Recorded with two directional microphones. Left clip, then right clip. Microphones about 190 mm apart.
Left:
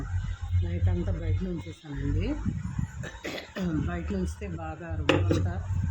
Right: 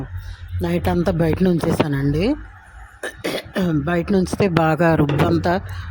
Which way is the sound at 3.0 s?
45° right (ahead or behind).